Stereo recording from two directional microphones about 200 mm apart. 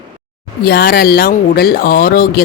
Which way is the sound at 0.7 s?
50° left (ahead or behind).